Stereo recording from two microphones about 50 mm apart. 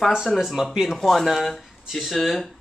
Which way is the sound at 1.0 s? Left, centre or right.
Centre.